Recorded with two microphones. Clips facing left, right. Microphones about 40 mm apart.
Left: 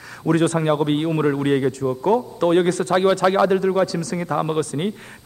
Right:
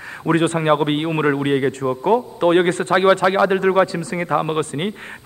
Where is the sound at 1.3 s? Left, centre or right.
Right.